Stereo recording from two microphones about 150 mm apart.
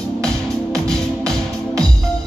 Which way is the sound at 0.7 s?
5° left (ahead or behind).